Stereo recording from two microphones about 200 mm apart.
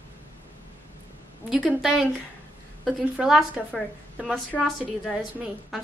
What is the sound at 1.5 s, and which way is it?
A woman's voice, 5° right (ahead or behind).